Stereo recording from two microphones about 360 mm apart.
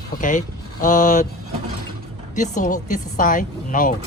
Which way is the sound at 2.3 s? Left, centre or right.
Left.